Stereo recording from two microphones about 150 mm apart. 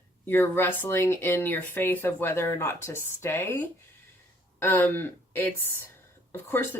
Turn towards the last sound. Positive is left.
turn(degrees=15)  # may be behind; listen again after turning